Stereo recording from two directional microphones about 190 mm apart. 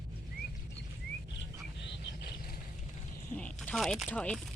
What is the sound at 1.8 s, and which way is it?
Frog, 55° left (ahead or behind).